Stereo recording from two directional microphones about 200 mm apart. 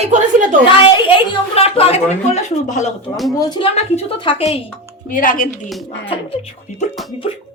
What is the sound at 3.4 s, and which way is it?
A woman's voice, 25° left (ahead or behind).